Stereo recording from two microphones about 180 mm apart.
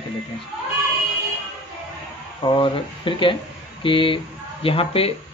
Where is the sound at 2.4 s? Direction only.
25° left (ahead or behind).